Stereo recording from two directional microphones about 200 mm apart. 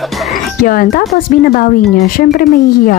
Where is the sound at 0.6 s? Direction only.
45° left (ahead or behind).